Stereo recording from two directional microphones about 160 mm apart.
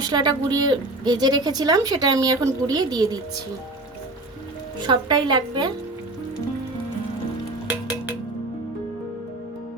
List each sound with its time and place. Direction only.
0.1 s speech: 25° right (ahead or behind)
4.9 s speech: 30° right (ahead or behind)